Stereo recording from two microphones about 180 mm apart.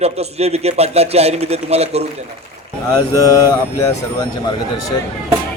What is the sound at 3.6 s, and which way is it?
Speech, 15° left (ahead or behind).